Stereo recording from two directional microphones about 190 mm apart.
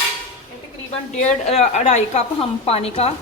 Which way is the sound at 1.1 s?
35° left (ahead or behind).